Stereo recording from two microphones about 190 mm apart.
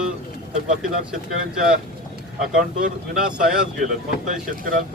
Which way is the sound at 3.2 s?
5° right (ahead or behind).